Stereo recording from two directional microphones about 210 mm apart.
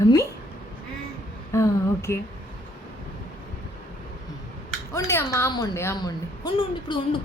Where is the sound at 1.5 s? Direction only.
15° left (ahead or behind).